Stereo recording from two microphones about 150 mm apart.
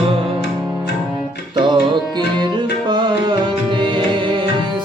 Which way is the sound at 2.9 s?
30° right (ahead or behind).